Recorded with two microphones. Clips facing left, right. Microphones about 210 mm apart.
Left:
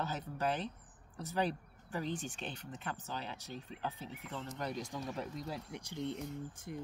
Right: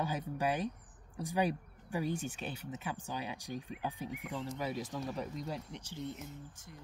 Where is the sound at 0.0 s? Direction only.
10° right (ahead or behind).